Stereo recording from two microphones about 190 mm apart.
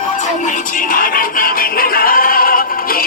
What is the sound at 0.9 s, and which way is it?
Music, 45° left (ahead or behind).